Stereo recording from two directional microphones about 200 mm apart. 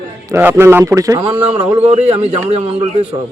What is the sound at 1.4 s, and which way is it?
A man's voice, 30° right (ahead or behind).